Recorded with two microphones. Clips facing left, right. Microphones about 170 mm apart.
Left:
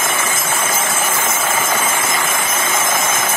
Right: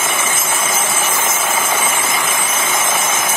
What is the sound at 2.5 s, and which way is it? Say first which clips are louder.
Vehicle: even; centre (ahead or behind).